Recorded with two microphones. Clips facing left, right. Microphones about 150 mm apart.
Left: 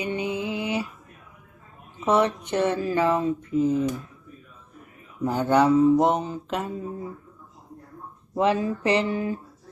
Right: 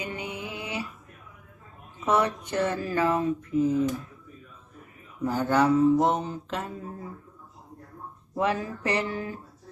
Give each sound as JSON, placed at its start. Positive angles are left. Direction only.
{"t": 0.0, "sound": "a sound", "side_deg": 20}
{"t": 2.0, "sound": "speech", "side_deg": 20}
{"t": 5.2, "sound": "speech", "side_deg": 20}
{"t": 8.4, "sound": "speech", "side_deg": 20}